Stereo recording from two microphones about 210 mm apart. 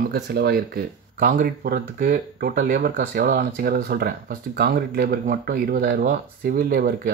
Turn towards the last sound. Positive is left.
turn(degrees=-45)  # may be behind; listen again after turning